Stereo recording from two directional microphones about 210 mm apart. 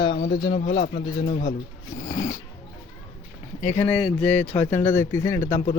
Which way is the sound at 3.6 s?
10° left (ahead or behind).